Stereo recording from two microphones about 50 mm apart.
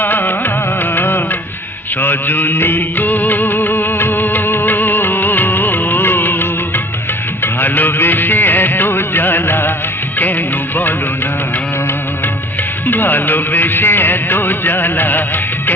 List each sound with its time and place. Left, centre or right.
0.0 s music: left
12.9 s music: left